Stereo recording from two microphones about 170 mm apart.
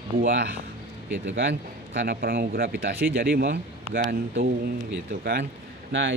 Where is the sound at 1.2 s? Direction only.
90° right; by 4.5 s 55° right (ahead or behind).